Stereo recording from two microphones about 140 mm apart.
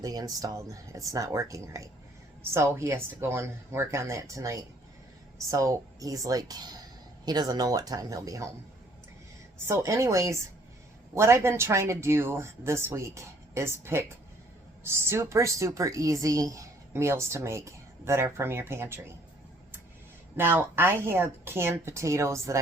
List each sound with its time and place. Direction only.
0.0 s a woman's voice: 25° right (ahead or behind)
9.6 s a woman's voice: 20° right (ahead or behind)
14.8 s a woman's voice: 15° right (ahead or behind)
20.3 s a woman's voice: 15° right (ahead or behind)